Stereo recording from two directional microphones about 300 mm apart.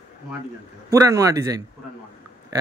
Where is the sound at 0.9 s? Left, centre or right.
Centre.